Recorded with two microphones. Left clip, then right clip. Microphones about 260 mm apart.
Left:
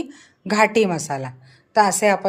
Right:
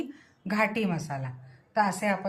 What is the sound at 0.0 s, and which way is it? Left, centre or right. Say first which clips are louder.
A woman's voice: left 6 dB; left.